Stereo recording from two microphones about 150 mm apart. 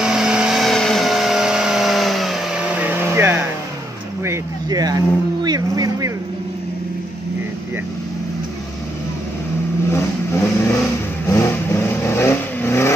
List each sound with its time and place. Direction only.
0.0 s vehicle: 5° right (ahead or behind); by 6.1 s 25° right (ahead or behind)
9.8 s vehicle: 15° left (ahead or behind)